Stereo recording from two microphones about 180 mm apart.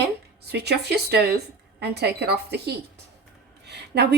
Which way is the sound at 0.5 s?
65° right (ahead or behind).